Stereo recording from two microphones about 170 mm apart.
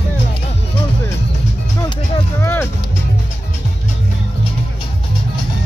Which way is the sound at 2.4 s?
15° left (ahead or behind).